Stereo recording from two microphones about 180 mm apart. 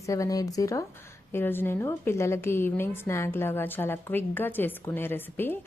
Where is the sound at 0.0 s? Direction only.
15° left (ahead or behind).